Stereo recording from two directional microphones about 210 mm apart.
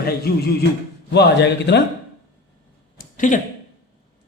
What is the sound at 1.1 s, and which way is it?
Speech, 55° left (ahead or behind).